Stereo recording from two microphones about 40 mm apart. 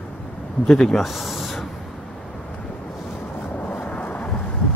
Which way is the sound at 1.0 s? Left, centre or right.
Centre.